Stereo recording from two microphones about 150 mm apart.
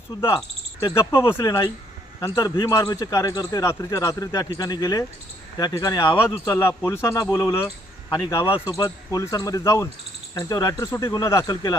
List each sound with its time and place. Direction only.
0.2 s cricket: 20° left (ahead or behind)
1.3 s a man's voice: 25° left (ahead or behind)
6.3 s a man's voice: 15° left (ahead or behind)